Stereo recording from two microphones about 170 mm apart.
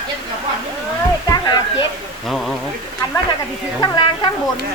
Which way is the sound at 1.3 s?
25° left (ahead or behind).